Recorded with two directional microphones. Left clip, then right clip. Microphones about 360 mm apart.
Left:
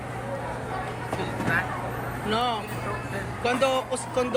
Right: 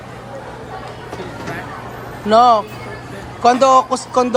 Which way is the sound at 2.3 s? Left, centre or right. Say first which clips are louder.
Right 17 dB; centre.